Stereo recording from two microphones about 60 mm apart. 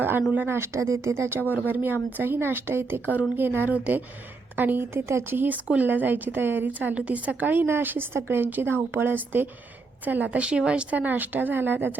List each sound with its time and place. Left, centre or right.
0.2 s speech: right
0.4 s speech: right
0.8 s a woman's voice: right
5.6 s a woman's voice: right